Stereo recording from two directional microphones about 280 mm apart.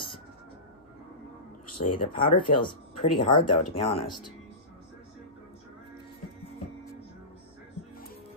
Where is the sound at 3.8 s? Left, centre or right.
Centre.